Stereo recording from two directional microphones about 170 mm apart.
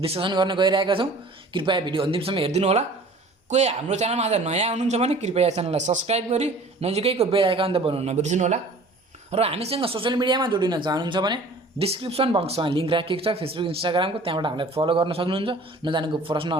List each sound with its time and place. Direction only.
0.0 s a man's voice: 30° right (ahead or behind)